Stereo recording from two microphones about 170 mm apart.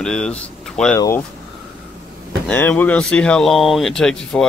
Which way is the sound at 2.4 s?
10° left (ahead or behind).